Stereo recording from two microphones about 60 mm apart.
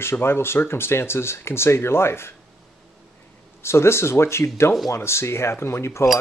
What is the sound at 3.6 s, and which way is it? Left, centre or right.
Speech, left.